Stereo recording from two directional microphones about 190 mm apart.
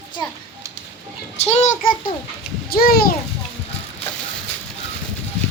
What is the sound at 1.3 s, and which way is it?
Speech, 35° left (ahead or behind).